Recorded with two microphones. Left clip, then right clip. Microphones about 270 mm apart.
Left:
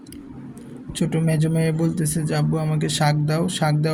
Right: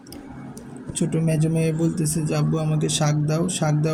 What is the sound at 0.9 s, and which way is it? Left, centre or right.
Speech, centre.